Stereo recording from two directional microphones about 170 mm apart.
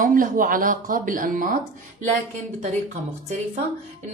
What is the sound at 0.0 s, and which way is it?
Speech, 50° right (ahead or behind).